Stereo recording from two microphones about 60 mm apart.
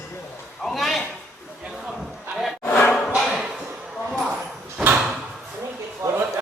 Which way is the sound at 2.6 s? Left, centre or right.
Left.